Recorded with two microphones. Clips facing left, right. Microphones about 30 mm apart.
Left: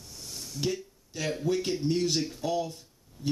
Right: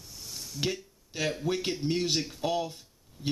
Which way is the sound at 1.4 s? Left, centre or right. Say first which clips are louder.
Left 2 dB; right.